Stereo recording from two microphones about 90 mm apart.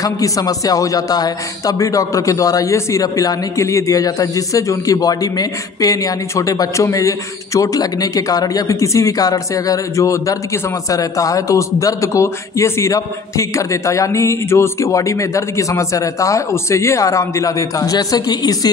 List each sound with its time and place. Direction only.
0.0 s a man's voice: 40° left (ahead or behind)